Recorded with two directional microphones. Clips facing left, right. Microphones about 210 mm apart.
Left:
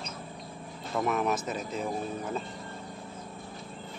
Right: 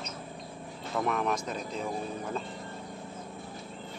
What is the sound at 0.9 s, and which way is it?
Speech, 5° left (ahead or behind).